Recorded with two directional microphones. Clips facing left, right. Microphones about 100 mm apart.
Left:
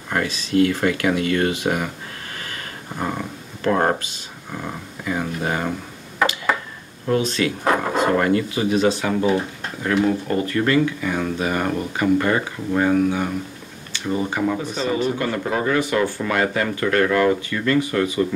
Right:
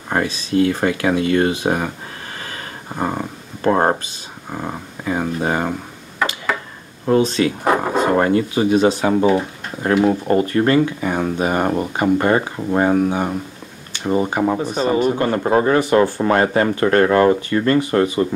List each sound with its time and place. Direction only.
0.1 s speech: 25° right (ahead or behind)
2.3 s a sound: 30° right (ahead or behind)
4.5 s speech: 25° right (ahead or behind)
7.2 s speech: 20° right (ahead or behind)
14.7 s speech: 45° right (ahead or behind)